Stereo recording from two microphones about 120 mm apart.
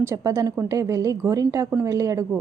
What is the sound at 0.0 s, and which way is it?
A woman's voice, 25° right (ahead or behind).